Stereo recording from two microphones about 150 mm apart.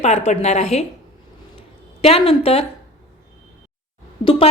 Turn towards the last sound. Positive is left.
turn(degrees=40)  # may be behind; listen again after turning